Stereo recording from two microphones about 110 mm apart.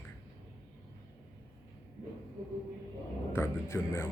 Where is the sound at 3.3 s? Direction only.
25° left (ahead or behind).